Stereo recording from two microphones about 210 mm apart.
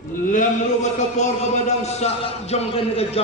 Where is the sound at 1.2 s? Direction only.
35° left (ahead or behind).